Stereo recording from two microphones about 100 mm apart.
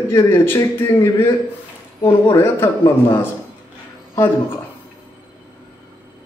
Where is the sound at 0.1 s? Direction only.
25° left (ahead or behind).